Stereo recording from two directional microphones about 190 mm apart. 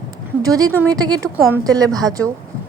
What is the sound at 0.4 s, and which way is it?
Speech, 20° right (ahead or behind).